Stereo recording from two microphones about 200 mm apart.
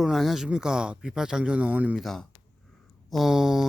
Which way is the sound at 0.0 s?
Centre (ahead or behind).